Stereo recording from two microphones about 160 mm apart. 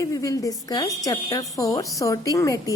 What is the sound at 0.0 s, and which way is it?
Speech, 20° left (ahead or behind).